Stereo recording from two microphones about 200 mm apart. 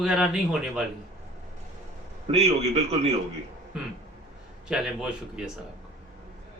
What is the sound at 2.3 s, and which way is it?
Speech, 30° right (ahead or behind).